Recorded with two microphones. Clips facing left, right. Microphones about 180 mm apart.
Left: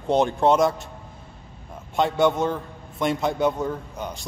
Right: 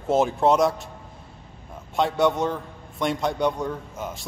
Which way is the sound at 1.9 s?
Centre (ahead or behind).